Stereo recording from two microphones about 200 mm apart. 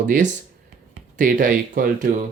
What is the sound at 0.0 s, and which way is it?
Speech, 40° right (ahead or behind).